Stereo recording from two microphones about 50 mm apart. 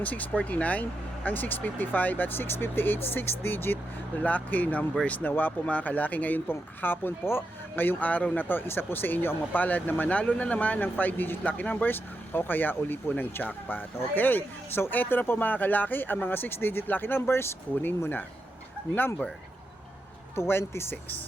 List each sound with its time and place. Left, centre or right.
0.0 s speech: left
4.2 s speech: left
6.5 s speech: left
20.3 s speech: left